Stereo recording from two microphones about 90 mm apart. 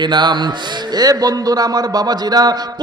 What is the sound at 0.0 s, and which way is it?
A man's voice, 60° right (ahead or behind).